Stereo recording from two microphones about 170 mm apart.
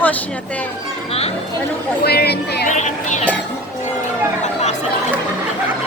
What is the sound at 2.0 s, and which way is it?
Speech, 70° left (ahead or behind).